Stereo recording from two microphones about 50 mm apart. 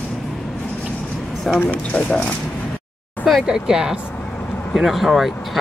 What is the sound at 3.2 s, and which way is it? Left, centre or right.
Speech, centre.